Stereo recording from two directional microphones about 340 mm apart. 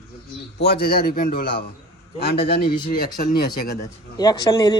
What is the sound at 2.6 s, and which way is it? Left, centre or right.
Speech, left.